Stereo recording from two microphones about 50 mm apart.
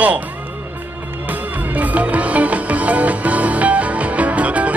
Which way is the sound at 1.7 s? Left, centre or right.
Right.